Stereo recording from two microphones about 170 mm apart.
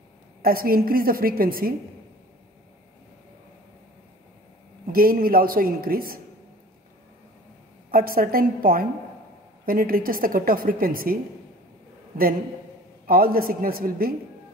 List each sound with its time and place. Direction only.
0.4 s a woman's voice: 60° right (ahead or behind)
4.8 s a woman's voice: 60° right (ahead or behind)
7.9 s a woman's voice: 60° right (ahead or behind)
13.0 s a woman's voice: 60° right (ahead or behind)